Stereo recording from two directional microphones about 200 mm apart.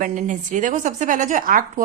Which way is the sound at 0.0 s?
40° right (ahead or behind).